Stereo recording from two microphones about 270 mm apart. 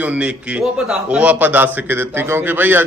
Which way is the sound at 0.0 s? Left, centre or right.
Centre.